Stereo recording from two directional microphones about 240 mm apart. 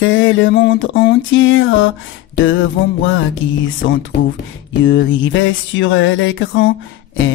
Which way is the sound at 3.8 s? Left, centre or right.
Left.